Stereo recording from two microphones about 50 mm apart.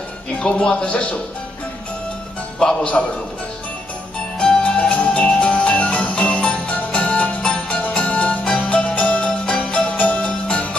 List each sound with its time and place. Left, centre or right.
0.4 s speech: centre
3.0 s a man's voice: centre
4.4 s music: centre